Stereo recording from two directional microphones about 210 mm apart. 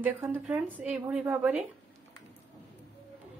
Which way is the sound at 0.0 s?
10° right (ahead or behind).